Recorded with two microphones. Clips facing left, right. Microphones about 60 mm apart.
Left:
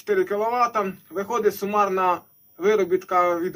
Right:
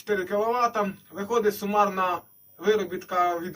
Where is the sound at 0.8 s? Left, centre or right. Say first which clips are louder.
Left 3 dB; left.